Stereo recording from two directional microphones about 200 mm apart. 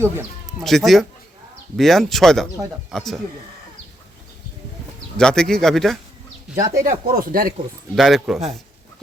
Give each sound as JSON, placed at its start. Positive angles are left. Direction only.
{"t": 0.6, "sound": "speech", "side_deg": 0}
{"t": 5.1, "sound": "speech", "side_deg": 5}
{"t": 6.6, "sound": "speech", "side_deg": -15}
{"t": 6.8, "sound": "speech", "side_deg": -45}
{"t": 7.9, "sound": "speech", "side_deg": 0}